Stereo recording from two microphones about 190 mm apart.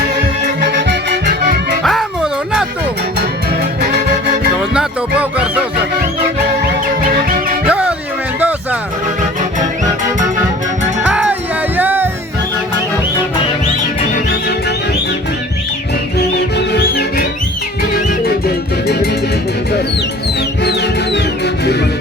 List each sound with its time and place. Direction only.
0.6 s music: 65° right (ahead or behind)
1.8 s a sound: centre (ahead or behind)
7.7 s music: 5° right (ahead or behind)
11.0 s music: 5° right (ahead or behind)
16.1 s music: 55° left (ahead or behind)
20.6 s music: 60° left (ahead or behind)